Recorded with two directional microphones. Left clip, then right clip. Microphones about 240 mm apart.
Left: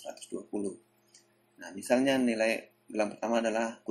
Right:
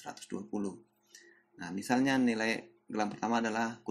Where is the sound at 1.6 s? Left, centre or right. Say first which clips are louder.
Left 4 dB; centre.